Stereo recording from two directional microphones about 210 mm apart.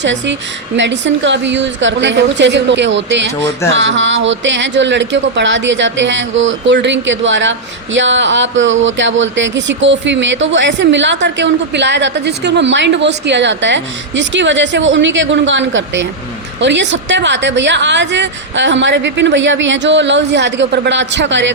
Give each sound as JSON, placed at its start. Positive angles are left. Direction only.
{"t": 0.0, "sound": "speech", "side_deg": -60}